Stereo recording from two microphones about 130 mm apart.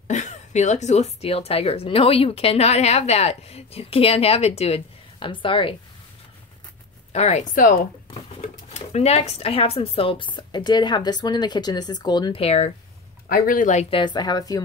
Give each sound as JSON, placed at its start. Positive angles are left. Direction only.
{"t": 0.1, "sound": "speech", "side_deg": 65}
{"t": 7.1, "sound": "speech", "side_deg": 55}
{"t": 7.5, "sound": "speech", "side_deg": 90}
{"t": 8.1, "sound": "speech", "side_deg": 55}
{"t": 12.4, "sound": "speech", "side_deg": 55}
{"t": 13.3, "sound": "speech", "side_deg": 90}
{"t": 13.8, "sound": "speech", "side_deg": 40}